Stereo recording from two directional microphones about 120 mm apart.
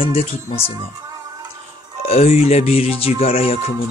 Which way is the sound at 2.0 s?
60° left (ahead or behind).